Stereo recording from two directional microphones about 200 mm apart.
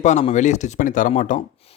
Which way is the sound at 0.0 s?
35° left (ahead or behind).